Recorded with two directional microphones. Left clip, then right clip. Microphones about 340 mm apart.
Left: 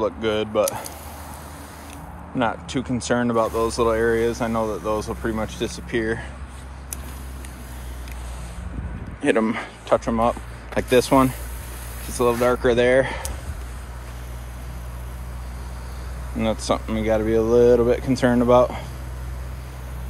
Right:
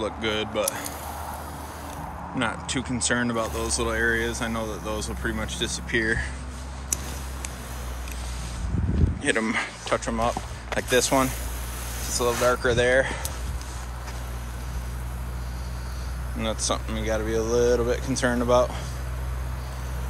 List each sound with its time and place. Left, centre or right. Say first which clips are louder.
0.0 s speech: left 4 dB; centre
2.3 s speech: left 4 dB; centre
9.2 s speech: left 4 dB; centre
10.0 s speech: left 5 dB; centre
12.4 s speech: left 2 dB; left
16.3 s speech: left 5 dB; centre